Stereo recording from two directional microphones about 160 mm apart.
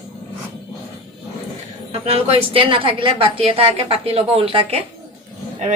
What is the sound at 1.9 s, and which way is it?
A woman's voice, 40° right (ahead or behind).